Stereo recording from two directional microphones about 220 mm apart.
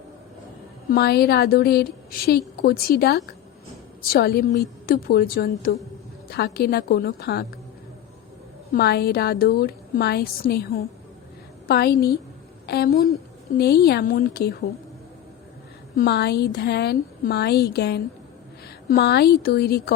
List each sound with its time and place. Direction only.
0.9 s a woman's voice: 45° left (ahead or behind)
8.7 s a woman's voice: 45° left (ahead or behind)
11.7 s a woman's voice: 45° left (ahead or behind)
16.0 s a woman's voice: 50° left (ahead or behind)